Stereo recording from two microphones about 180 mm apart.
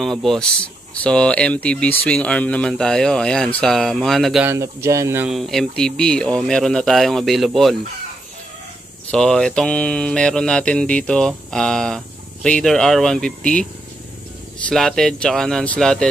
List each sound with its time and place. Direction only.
0.0 s speech: centre (ahead or behind)
4.5 s speech: 15° right (ahead or behind)
5.3 s speech: centre (ahead or behind)
9.1 s speech: 5° left (ahead or behind)
14.7 s speech: 5° left (ahead or behind)